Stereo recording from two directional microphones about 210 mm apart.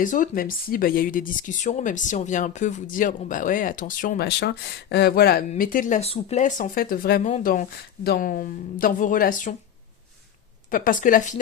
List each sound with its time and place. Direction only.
0.0 s speech: 40° left (ahead or behind)
10.7 s speech: 40° left (ahead or behind)